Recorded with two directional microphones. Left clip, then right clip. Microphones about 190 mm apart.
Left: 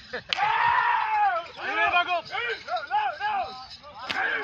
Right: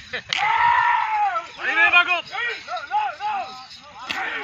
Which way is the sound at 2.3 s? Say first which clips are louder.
Right 2 dB; 20° left (ahead or behind).